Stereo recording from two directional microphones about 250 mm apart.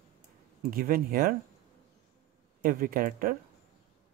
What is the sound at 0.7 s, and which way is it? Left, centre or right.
Speech, right.